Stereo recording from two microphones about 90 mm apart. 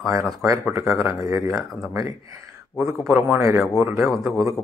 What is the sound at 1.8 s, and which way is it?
A man's voice, 35° right (ahead or behind).